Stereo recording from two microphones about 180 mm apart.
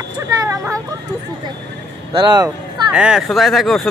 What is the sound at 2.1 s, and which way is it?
Speech, 25° right (ahead or behind).